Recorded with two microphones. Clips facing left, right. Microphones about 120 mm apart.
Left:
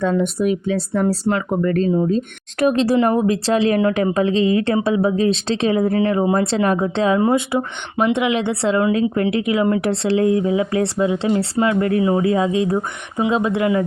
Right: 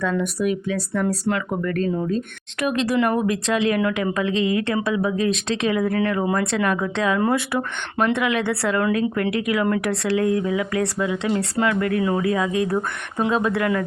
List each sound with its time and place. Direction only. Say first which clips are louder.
0.0 s a woman's voice: left 4 dB; 25° left (ahead or behind)
2.6 s a woman's voice: left 5 dB; 35° left (ahead or behind)